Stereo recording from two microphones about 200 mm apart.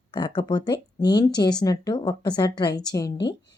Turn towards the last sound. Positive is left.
turn(degrees=20)  # may be behind; listen again after turning